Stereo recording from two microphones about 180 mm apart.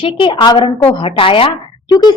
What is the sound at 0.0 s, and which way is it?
A woman's voice, 30° left (ahead or behind).